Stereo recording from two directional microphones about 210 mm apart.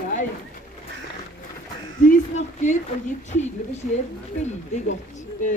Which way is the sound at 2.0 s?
35° left (ahead or behind).